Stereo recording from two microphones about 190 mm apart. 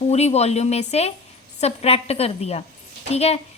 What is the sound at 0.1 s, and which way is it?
A woman's voice, 35° left (ahead or behind).